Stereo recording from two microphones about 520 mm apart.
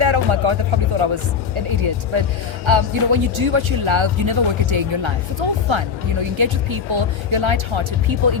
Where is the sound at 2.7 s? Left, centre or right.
Right.